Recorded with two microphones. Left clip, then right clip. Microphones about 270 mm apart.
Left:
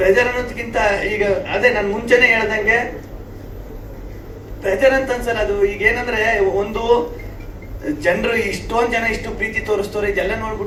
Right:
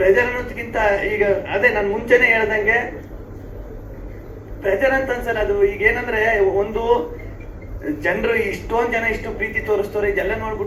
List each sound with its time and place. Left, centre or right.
0.0 s a man's voice: left
4.6 s a man's voice: left
8.0 s a man's voice: left